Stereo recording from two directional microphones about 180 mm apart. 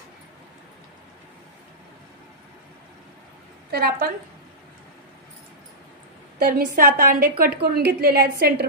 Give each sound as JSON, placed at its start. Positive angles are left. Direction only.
{"t": 3.7, "sound": "a woman's voice", "side_deg": -60}
{"t": 6.4, "sound": "a woman's voice", "side_deg": -50}